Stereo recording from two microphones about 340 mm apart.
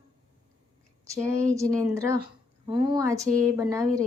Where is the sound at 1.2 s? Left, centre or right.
Centre.